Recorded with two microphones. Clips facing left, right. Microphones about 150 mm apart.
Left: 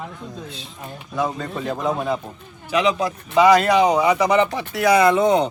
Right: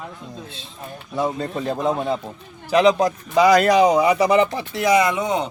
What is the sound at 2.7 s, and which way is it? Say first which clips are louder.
Speech: right 4 dB; 40° right (ahead or behind).